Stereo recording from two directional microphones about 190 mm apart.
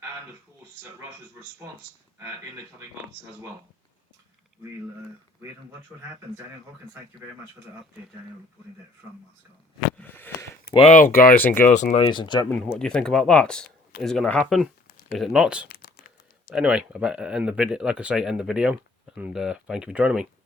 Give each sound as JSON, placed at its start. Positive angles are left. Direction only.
{"t": 2.1, "sound": "speech", "side_deg": -10}
{"t": 10.0, "sound": "a sound", "side_deg": 10}
{"t": 10.8, "sound": "speech", "side_deg": 40}
{"t": 11.3, "sound": "a sound", "side_deg": 10}
{"t": 12.0, "sound": "speech", "side_deg": 25}
{"t": 12.5, "sound": "speech", "side_deg": 5}
{"t": 15.7, "sound": "crumpling", "side_deg": 55}
{"t": 16.6, "sound": "speech", "side_deg": -5}